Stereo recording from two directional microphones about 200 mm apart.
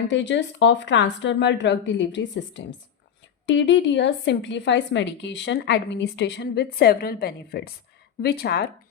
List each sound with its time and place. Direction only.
0.1 s a woman's voice: 65° left (ahead or behind)